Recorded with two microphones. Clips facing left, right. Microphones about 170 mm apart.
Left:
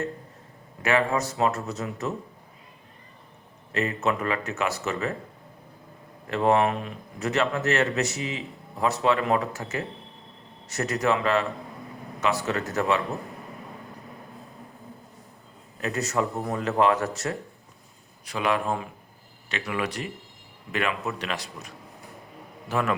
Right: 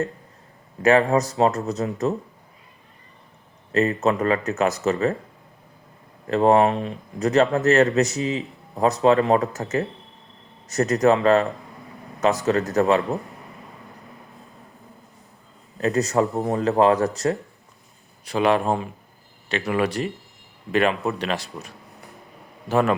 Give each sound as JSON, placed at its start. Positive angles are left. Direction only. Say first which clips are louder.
{"t": 0.8, "sound": "speech", "louder": "right 6 dB", "side_deg": -40}
{"t": 3.7, "sound": "speech", "louder": "right 6 dB", "side_deg": -35}
{"t": 6.2, "sound": "speech", "louder": "right 5 dB", "side_deg": -35}
{"t": 15.8, "sound": "speech", "louder": "right 6 dB", "side_deg": -35}
{"t": 21.2, "sound": "speech", "louder": "right 6 dB", "side_deg": -30}
{"t": 22.7, "sound": "speech", "louder": "right 6 dB", "side_deg": -30}